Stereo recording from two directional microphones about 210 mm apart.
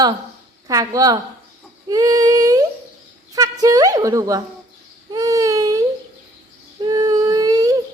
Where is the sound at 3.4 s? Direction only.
15° right (ahead or behind).